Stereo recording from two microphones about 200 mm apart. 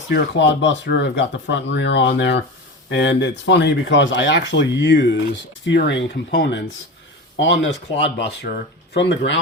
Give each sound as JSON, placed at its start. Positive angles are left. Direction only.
{"t": 0.1, "sound": "speech", "side_deg": 60}